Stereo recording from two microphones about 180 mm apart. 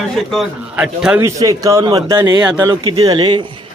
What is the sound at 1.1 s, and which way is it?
Speech, 15° right (ahead or behind).